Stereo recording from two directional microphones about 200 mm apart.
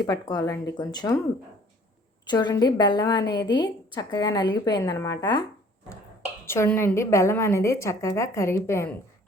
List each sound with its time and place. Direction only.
0.0 s a woman's voice: 20° left (ahead or behind)
2.2 s a woman's voice: 20° left (ahead or behind)
6.5 s a woman's voice: 10° left (ahead or behind)